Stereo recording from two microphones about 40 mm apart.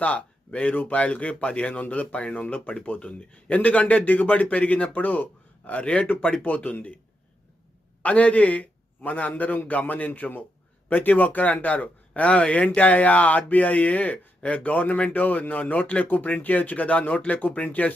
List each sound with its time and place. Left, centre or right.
0.0 s speech: left
5.8 s speech: left
8.0 s a man's voice: left